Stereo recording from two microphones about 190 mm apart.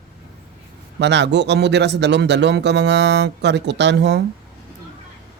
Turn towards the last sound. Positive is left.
turn(degrees=-65)  # may be behind; listen again after turning